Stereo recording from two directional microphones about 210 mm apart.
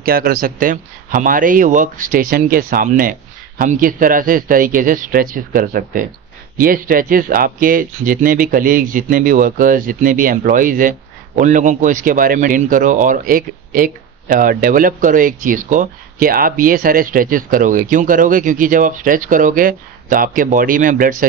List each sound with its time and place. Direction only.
0.0 s speech: 45° right (ahead or behind)